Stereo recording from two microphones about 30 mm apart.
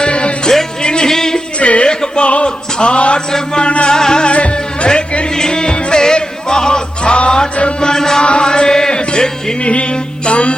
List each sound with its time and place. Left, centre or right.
0.0 s music: left; by 1.4 s centre
1.5 s a sound: left
1.9 s music: left
2.2 s a sound: left
2.7 s a man's voice: left
3.6 s music: left
3.8 s music: left
4.3 s music: left
5.3 s music: left
7.8 s music: left
8.2 s chant: left
9.0 s music: left
9.6 s music: left